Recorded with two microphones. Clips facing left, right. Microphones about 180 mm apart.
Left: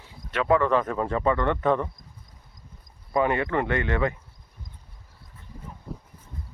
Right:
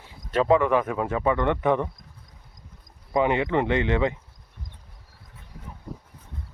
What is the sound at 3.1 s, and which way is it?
Speech, 20° right (ahead or behind).